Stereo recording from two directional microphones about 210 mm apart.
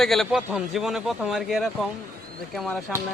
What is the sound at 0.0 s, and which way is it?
Speech, centre (ahead or behind).